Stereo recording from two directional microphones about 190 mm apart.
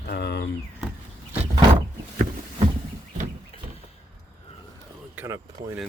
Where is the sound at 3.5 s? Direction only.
30° left (ahead or behind).